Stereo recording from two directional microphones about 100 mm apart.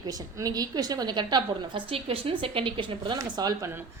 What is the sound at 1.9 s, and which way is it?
A woman's voice, 70° right (ahead or behind).